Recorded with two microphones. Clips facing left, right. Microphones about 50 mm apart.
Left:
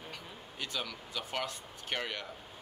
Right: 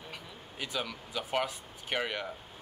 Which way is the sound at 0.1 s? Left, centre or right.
Centre.